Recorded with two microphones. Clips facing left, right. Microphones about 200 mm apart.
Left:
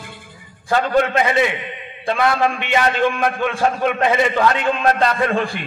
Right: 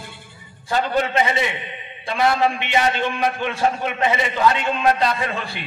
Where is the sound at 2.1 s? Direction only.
50° left (ahead or behind).